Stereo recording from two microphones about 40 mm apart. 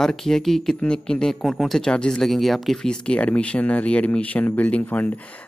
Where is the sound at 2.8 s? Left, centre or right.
Left.